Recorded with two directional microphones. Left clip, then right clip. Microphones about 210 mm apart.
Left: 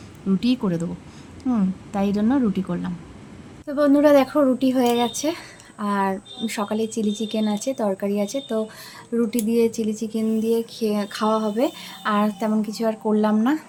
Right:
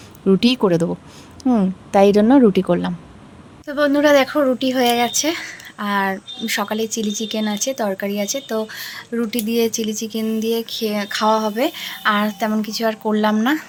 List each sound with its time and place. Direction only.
0.3 s a woman's voice: 45° right (ahead or behind)
3.7 s speech: 5° left (ahead or behind)